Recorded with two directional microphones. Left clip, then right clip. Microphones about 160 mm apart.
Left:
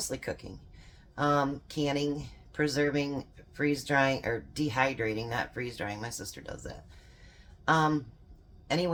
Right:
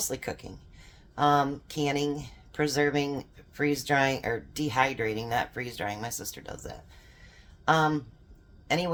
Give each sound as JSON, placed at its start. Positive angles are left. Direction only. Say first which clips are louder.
{"t": 0.1, "sound": "a woman's voice", "louder": "right 2 dB", "side_deg": -25}